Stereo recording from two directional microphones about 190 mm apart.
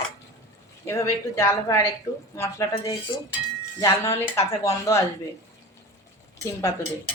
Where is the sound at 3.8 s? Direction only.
15° left (ahead or behind).